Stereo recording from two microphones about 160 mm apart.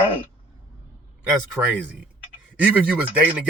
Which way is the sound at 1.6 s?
5° right (ahead or behind).